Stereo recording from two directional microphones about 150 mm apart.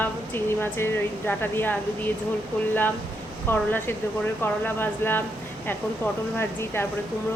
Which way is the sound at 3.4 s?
15° left (ahead or behind).